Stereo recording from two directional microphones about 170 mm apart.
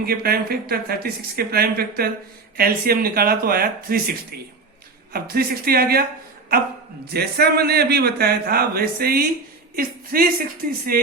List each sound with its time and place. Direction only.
0.0 s a man's voice: 65° right (ahead or behind)